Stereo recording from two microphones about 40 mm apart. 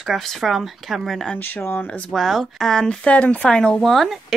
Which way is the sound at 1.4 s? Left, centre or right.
Left.